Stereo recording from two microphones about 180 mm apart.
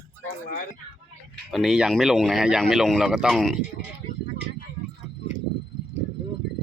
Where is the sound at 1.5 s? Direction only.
Centre (ahead or behind).